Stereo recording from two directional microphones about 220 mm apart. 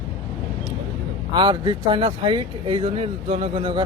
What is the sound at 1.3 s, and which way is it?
Speech, 20° right (ahead or behind).